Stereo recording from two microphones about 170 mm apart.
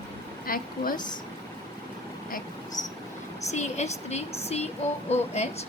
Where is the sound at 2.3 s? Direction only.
50° left (ahead or behind).